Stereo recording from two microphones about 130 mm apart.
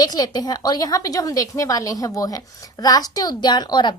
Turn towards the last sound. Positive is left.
turn(degrees=35)  # may be behind; listen again after turning